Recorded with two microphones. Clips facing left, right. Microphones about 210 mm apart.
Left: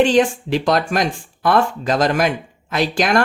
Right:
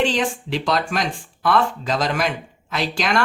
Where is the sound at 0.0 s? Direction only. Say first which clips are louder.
Left 7 dB; 45° left (ahead or behind).